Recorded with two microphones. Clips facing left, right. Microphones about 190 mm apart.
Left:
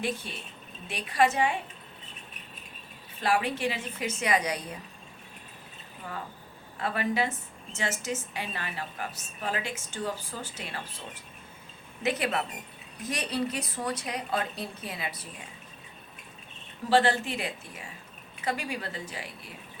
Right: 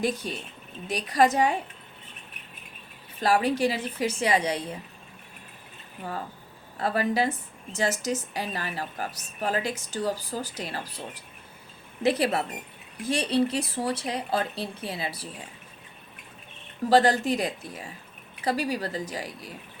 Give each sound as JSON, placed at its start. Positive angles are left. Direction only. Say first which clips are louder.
{"t": 0.0, "sound": "a woman's voice", "louder": "right 5 dB", "side_deg": -40}
{"t": 3.2, "sound": "a woman's voice", "louder": "right 5 dB", "side_deg": -40}
{"t": 6.7, "sound": "a woman's voice", "louder": "right 4 dB", "side_deg": -35}
{"t": 16.9, "sound": "a woman's voice", "louder": "right 4 dB", "side_deg": -40}